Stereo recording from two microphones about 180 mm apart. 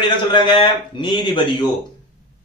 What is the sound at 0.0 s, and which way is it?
A man's voice, 25° left (ahead or behind).